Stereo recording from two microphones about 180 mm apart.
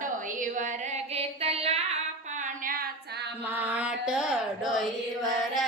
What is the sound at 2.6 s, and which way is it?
Female singing, 55° right (ahead or behind).